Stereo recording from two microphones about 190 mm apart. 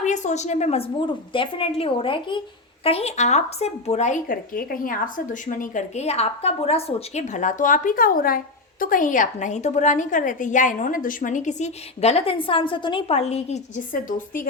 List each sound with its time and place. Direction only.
0.0 s a woman's voice: 40° left (ahead or behind)
13.9 s a woman's voice: 45° left (ahead or behind)